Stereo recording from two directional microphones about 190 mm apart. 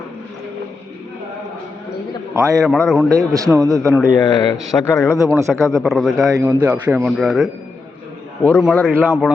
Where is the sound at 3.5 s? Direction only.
15° right (ahead or behind).